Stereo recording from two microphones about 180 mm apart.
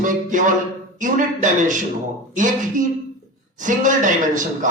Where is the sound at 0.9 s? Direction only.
45° right (ahead or behind).